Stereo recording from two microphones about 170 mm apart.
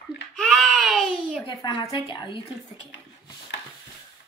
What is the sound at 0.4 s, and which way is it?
Baby cry, centre (ahead or behind).